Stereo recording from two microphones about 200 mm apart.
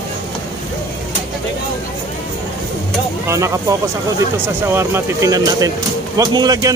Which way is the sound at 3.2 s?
15° right (ahead or behind).